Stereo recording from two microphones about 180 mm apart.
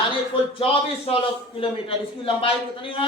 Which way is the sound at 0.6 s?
30° left (ahead or behind).